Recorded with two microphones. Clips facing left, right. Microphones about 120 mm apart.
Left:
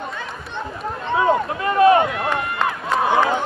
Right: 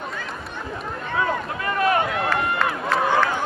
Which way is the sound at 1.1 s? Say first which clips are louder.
Left 7 dB; 25° left (ahead or behind).